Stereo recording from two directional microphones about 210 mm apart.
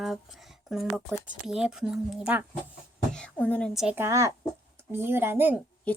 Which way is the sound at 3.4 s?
5° left (ahead or behind).